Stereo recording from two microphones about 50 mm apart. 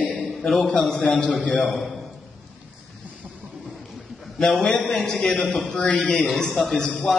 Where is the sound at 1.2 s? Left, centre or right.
Left.